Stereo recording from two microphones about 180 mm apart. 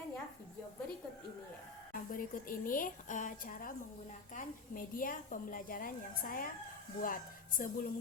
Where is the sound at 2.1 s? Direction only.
50° left (ahead or behind).